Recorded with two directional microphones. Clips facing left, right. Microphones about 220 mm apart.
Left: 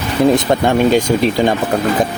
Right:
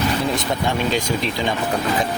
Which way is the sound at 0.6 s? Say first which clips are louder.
Left 8 dB; 55° left (ahead or behind).